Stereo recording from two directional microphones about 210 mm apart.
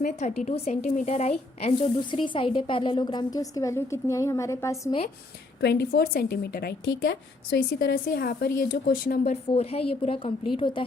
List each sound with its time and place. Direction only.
0.0 s speech: 35° left (ahead or behind); by 4.9 s 15° left (ahead or behind)
5.5 s a woman's voice: 50° left (ahead or behind)
9.5 s speech: 25° left (ahead or behind)